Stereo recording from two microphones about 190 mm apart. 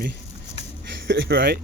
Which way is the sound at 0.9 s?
70° right (ahead or behind).